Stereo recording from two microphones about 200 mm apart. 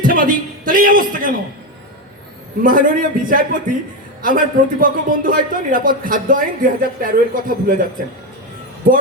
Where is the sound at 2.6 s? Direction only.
45° right (ahead or behind).